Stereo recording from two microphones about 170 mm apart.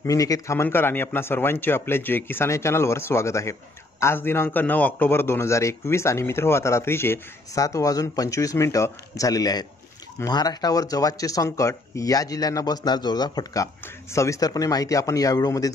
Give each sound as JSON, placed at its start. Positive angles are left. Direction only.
{"t": 0.0, "sound": "a man's voice", "side_deg": 20}